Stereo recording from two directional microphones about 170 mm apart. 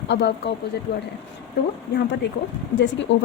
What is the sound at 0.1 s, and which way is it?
Speech, 85° left.